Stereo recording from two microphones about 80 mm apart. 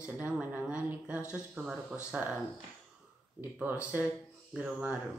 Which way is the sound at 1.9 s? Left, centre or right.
Centre.